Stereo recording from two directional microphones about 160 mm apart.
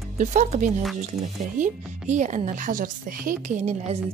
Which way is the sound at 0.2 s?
50° right (ahead or behind).